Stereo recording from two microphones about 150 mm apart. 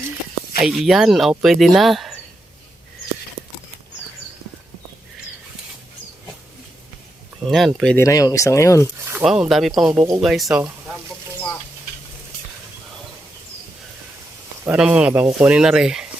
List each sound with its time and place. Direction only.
0.6 s speech: centre (ahead or behind)
7.5 s speech: centre (ahead or behind)
7.9 s speech: 20° left (ahead or behind)
9.2 s speech: 5° right (ahead or behind)
9.8 s speech: 15° right (ahead or behind)
10.2 s speech: centre (ahead or behind)
14.6 s speech: 10° right (ahead or behind)